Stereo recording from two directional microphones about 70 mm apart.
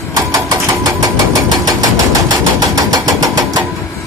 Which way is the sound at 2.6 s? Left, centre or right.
Right.